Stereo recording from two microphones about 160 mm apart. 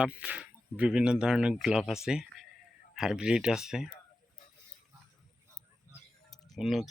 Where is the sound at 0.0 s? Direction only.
5° right (ahead or behind).